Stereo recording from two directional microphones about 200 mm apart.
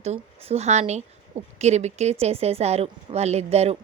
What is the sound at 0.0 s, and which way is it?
A woman's voice, 30° right (ahead or behind).